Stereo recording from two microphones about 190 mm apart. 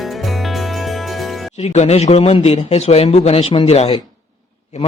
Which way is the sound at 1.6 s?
35° left (ahead or behind).